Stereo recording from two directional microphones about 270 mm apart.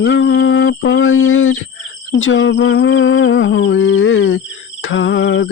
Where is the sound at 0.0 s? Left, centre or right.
Left.